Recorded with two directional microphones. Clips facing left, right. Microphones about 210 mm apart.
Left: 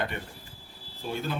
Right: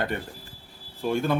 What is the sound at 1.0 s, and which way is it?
Speech, 55° right (ahead or behind).